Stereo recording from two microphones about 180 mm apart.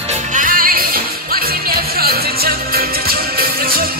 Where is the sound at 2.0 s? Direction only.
55° right (ahead or behind).